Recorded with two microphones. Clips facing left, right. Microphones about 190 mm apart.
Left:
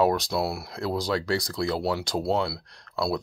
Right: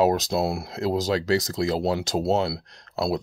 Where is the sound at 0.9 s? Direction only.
45° right (ahead or behind).